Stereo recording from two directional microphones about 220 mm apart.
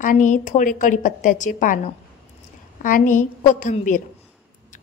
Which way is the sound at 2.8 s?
35° left (ahead or behind).